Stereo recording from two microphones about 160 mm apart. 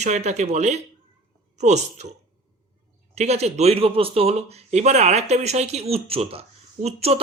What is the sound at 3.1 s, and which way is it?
A man's voice, 45° right (ahead or behind).